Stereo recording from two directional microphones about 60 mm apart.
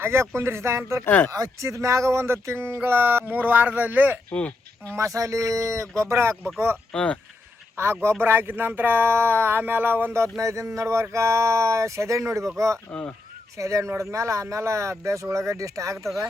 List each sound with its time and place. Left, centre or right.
0.0 s speech: right
1.0 s speech: left
1.3 s speech: right
4.3 s speech: left
4.9 s speech: right
6.0 s speech: right
6.9 s speech: centre
8.2 s speech: right
10.3 s speech: right